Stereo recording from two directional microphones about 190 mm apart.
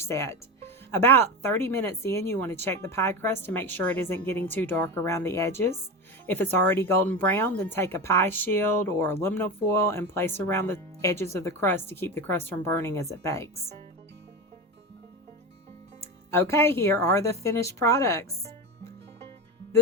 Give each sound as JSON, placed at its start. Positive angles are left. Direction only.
{"t": 0.0, "sound": "speech", "side_deg": 15}
{"t": 16.0, "sound": "speech", "side_deg": 15}